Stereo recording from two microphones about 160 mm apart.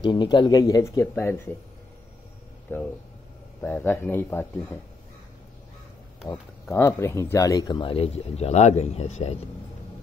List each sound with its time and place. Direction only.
0.0 s speech: 30° left (ahead or behind)
3.6 s speech: 15° left (ahead or behind)
6.6 s a man's voice: 15° left (ahead or behind); by 9.4 s 45° left (ahead or behind)